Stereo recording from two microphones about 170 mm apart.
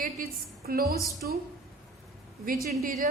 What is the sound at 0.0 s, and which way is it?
A woman's voice, 60° right (ahead or behind).